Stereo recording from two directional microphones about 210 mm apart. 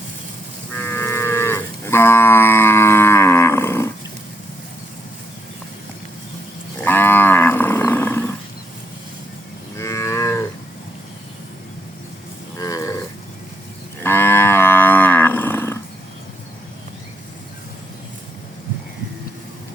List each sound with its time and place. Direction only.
0.7 s livestock: 10° left (ahead or behind)
6.8 s livestock: 10° left (ahead or behind)
9.7 s livestock: 15° left (ahead or behind)
12.5 s livestock: 15° left (ahead or behind)
14.0 s livestock: 10° left (ahead or behind)